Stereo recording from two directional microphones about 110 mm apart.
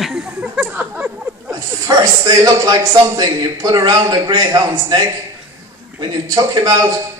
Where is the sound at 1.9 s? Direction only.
35° right (ahead or behind).